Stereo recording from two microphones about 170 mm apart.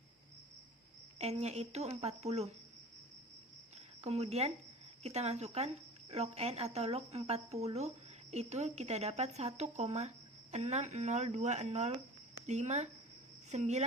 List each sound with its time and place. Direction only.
1.2 s speech: 40° right (ahead or behind)
4.0 s speech: 40° right (ahead or behind)